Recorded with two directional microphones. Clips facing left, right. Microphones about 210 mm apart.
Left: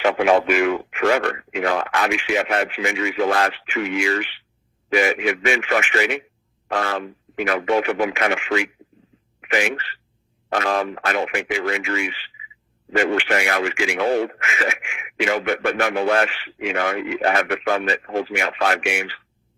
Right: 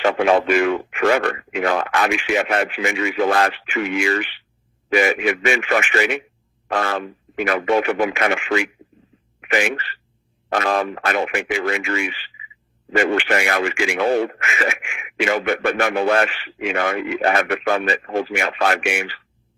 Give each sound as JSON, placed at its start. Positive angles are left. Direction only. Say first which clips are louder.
{"t": 0.0, "sound": "speech", "louder": "even", "side_deg": 5}
{"t": 0.9, "sound": "a man's voice", "louder": "right 2 dB", "side_deg": -50}